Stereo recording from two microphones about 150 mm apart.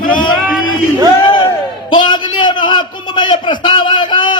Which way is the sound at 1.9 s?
30° left (ahead or behind).